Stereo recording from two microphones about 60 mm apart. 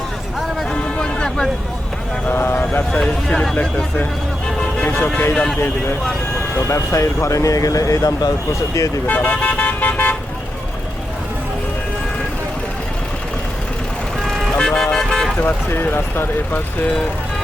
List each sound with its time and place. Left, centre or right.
0.7 s music: centre
2.3 s speech: left
2.9 s speech: centre
4.9 s speech: centre
6.7 s speech: left
9.0 s vehicle: left
14.2 s vehicle: centre
14.5 s speech: centre
14.9 s vehicle: centre
15.4 s speech: left